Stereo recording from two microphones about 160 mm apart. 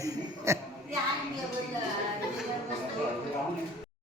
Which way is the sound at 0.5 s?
20° right (ahead or behind).